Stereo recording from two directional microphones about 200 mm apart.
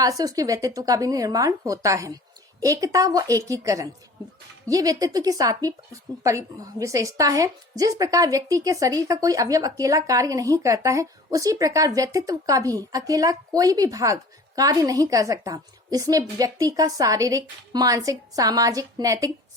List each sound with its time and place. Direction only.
0.0 s speech: 20° right (ahead or behind)